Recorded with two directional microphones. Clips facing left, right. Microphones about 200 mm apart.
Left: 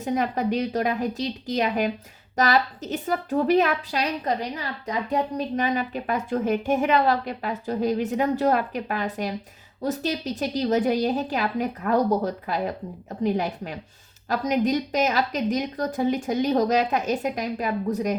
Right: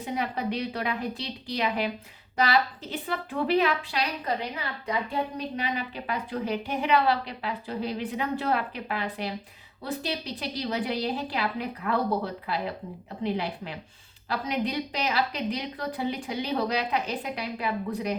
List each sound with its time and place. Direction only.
0.0 s a woman's voice: 45° left (ahead or behind)